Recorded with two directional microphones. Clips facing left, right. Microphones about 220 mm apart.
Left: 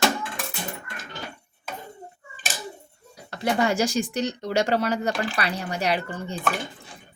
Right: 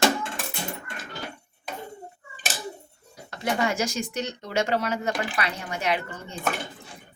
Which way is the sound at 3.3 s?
35° left (ahead or behind).